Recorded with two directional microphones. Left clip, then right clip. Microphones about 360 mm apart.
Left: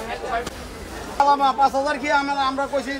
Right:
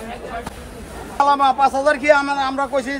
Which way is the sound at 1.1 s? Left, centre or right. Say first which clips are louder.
Right 2 dB; right.